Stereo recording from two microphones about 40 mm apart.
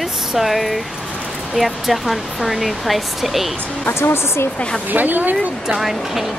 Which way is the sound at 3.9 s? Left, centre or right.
Left.